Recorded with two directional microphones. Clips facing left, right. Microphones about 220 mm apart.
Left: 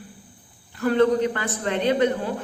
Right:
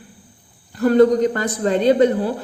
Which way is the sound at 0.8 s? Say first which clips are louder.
Right 6 dB; 40° right (ahead or behind).